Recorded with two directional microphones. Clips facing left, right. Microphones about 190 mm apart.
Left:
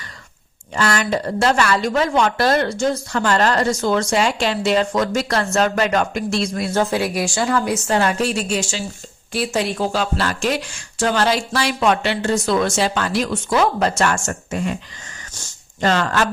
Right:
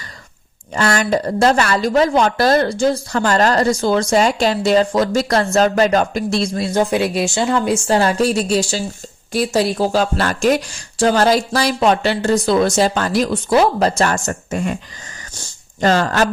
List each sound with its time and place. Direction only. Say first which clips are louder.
0.7 s a woman's voice: right 3 dB; 40° right (ahead or behind)
6.7 s a woman's voice: right 3 dB; 20° right (ahead or behind); by 14.8 s 45° right (ahead or behind)
15.8 s a woman's voice: right 3 dB; 40° right (ahead or behind)